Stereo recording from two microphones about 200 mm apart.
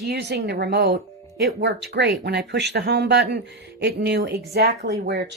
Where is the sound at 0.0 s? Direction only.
60° right (ahead or behind).